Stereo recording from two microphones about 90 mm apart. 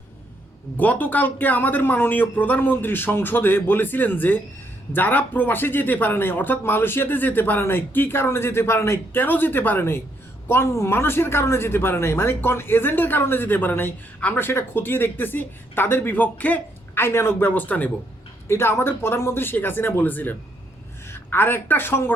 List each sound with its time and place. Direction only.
0.8 s speech: 20° left (ahead or behind)
17.5 s a man's voice: 15° left (ahead or behind)